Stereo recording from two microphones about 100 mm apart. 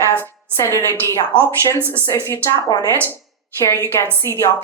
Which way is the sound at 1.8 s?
25° right (ahead or behind).